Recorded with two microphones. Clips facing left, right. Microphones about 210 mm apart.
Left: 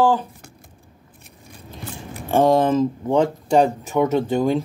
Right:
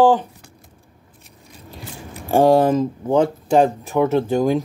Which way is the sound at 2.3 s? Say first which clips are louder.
Right 2 dB; 35° right (ahead or behind).